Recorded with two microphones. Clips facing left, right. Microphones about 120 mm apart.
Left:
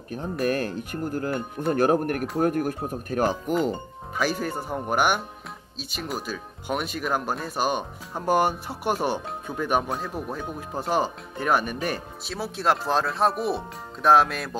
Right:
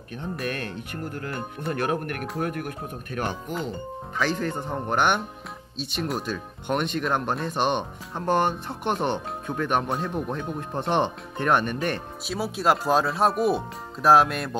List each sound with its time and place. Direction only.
0.5 s speech: 35° left (ahead or behind)
3.3 s speech: centre (ahead or behind)